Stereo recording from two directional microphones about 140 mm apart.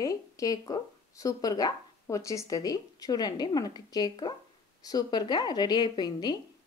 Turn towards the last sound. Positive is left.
turn(degrees=30)  # may be behind; listen again after turning